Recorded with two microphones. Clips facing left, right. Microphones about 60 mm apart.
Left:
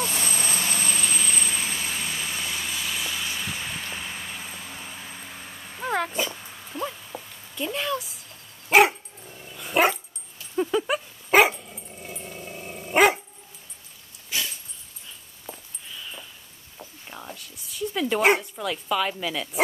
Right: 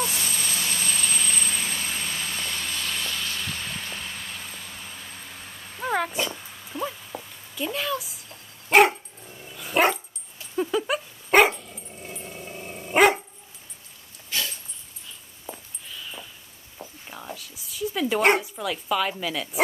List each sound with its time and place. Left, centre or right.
0.0 s vehicle: centre
0.3 s vehicle: left; by 8.2 s centre
8.6 s dog: centre
14.3 s dog: centre
15.5 s a sound: centre
16.7 s dog: centre